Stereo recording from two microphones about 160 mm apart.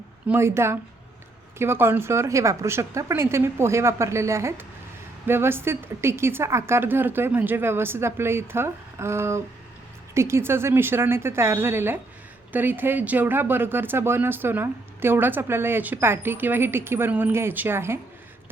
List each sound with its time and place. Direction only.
0.3 s speech: 15° right (ahead or behind)